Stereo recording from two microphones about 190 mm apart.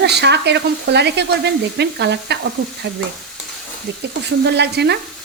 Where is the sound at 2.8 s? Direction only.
70° right (ahead or behind).